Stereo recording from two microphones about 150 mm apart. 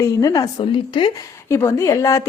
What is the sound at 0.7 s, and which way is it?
Speech, 35° left (ahead or behind).